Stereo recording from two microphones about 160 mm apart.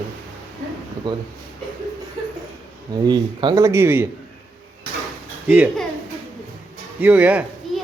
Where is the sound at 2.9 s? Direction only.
25° right (ahead or behind).